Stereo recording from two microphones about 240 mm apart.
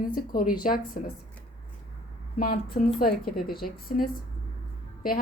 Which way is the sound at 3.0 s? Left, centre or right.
Left.